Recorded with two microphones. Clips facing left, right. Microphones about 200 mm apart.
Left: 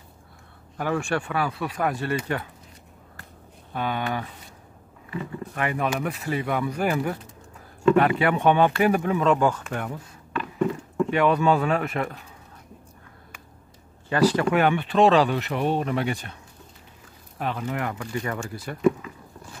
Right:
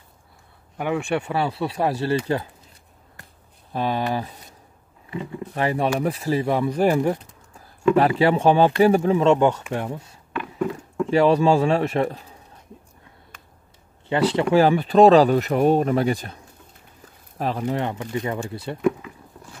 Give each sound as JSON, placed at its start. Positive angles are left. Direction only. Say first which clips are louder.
{"t": 0.7, "sound": "speech", "louder": "right 2 dB", "side_deg": -15}
{"t": 3.7, "sound": "speech", "louder": "right 4 dB", "side_deg": -35}
{"t": 5.5, "sound": "speech", "louder": "right 4 dB", "side_deg": -30}
{"t": 10.6, "sound": "a sound", "louder": "left 1 dB", "side_deg": 0}
{"t": 11.1, "sound": "speech", "louder": "right 4 dB", "side_deg": -30}
{"t": 14.0, "sound": "speech", "louder": "even", "side_deg": -25}
{"t": 17.4, "sound": "speech", "louder": "right 4 dB", "side_deg": -35}
{"t": 18.8, "sound": "speech", "louder": "left 1 dB", "side_deg": -10}